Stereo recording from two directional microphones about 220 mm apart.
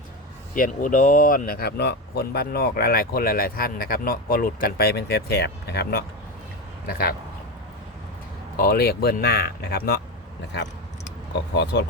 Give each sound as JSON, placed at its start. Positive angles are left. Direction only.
{"t": 0.5, "sound": "speech", "side_deg": 35}
{"t": 8.5, "sound": "speech", "side_deg": 45}
{"t": 11.5, "sound": "speech", "side_deg": 50}